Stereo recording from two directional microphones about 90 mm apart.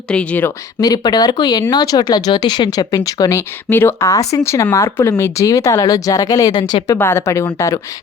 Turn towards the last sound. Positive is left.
turn(degrees=35)  # may be behind; listen again after turning